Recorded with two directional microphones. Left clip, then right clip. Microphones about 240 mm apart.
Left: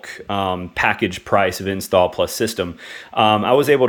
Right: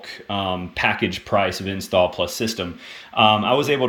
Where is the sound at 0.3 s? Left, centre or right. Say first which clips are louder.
Left 3 dB; centre.